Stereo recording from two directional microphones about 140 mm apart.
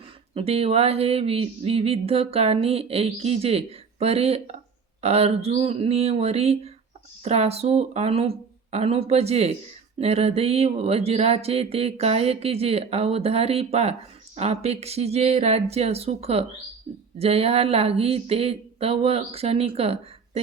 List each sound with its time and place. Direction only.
0.3 s speech: 45° right (ahead or behind)